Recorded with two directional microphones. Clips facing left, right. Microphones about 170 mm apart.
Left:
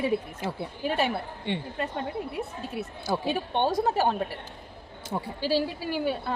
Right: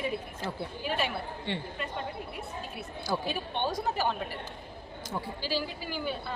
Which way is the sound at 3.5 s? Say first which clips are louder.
Left 7 dB; 55° left (ahead or behind).